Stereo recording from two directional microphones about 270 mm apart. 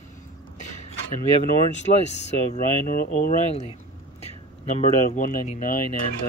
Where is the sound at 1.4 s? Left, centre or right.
Left.